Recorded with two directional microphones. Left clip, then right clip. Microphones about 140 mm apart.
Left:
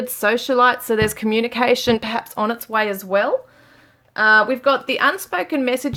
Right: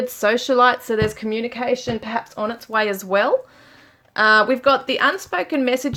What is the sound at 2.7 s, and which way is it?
Speech, 5° left (ahead or behind).